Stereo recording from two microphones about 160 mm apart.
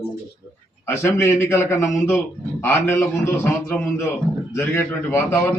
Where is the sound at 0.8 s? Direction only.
15° left (ahead or behind).